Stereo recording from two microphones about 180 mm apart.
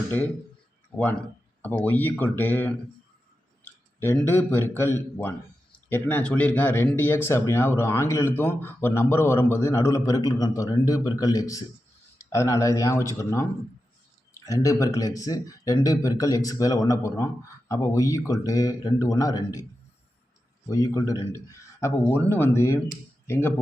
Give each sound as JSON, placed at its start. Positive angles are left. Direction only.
{"t": 1.6, "sound": "a man's voice", "side_deg": 10}
{"t": 20.7, "sound": "speech", "side_deg": 20}